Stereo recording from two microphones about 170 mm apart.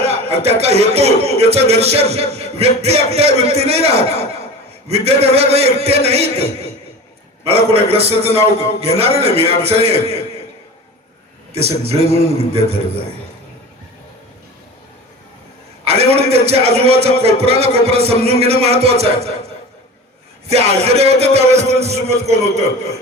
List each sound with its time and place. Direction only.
0.0 s speech: 35° right (ahead or behind)
11.5 s speech: 35° right (ahead or behind)
15.8 s speech: 35° right (ahead or behind)
20.5 s speech: 35° right (ahead or behind)